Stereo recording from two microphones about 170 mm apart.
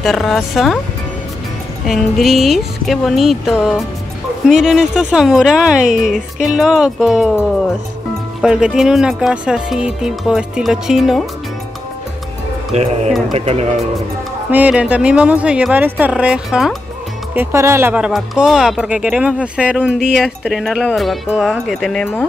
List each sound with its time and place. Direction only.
0.0 s speech: centre (ahead or behind)
1.9 s speech: centre (ahead or behind)
8.4 s speech: 5° right (ahead or behind)
12.7 s speech: 40° right (ahead or behind)
14.5 s speech: 10° right (ahead or behind)
17.3 s speech: 15° right (ahead or behind); by 22.2 s 10° left (ahead or behind)